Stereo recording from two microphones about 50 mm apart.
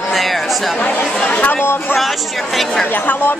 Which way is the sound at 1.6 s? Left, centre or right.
Left.